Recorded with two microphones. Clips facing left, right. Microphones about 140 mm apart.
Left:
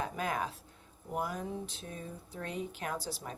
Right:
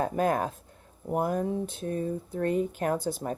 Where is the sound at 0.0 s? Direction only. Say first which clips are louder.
Right 9 dB; 50° right (ahead or behind).